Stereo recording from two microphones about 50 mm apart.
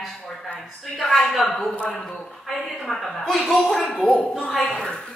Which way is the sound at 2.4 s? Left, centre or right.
Centre.